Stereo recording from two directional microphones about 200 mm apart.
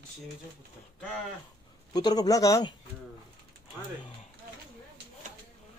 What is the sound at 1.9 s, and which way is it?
Speech, 20° left (ahead or behind).